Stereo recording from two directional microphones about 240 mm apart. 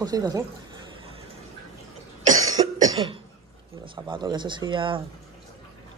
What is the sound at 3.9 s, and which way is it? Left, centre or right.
A woman's voice, centre.